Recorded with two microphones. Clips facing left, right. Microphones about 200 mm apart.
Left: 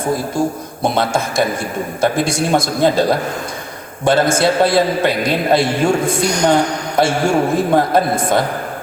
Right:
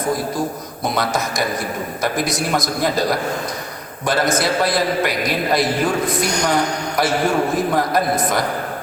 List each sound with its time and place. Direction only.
0.0 s a man's voice: 30° left (ahead or behind)